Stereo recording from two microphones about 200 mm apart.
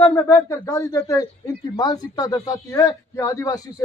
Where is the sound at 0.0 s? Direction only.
10° left (ahead or behind).